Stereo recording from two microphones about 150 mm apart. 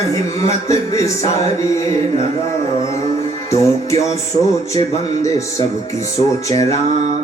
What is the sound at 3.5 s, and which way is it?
Speech, 20° left (ahead or behind).